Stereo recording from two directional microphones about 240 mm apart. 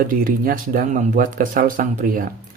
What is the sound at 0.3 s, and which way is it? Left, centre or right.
Speech, right.